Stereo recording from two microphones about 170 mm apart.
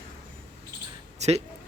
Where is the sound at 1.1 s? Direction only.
40° right (ahead or behind).